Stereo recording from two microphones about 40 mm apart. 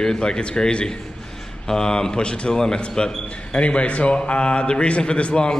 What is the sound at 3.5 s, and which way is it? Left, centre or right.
A man's voice, left.